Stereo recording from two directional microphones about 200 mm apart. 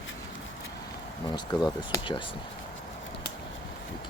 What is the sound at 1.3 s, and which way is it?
Speech, 20° left (ahead or behind).